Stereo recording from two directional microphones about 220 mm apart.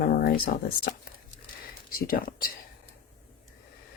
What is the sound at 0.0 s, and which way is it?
Speech, 45° left (ahead or behind).